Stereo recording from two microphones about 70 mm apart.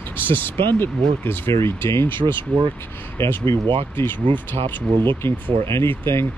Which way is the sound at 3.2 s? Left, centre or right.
Left.